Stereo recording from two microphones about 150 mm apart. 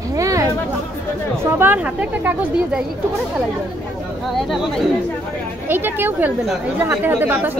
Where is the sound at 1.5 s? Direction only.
15° right (ahead or behind).